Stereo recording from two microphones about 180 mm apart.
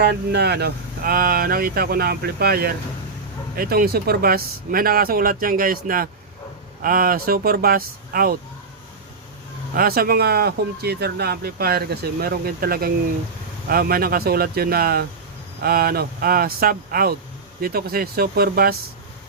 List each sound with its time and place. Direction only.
0.0 s speech: 65° right (ahead or behind)
9.7 s speech: 55° right (ahead or behind)